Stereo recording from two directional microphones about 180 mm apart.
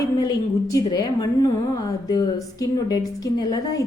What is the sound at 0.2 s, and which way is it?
A woman's voice, 20° left (ahead or behind).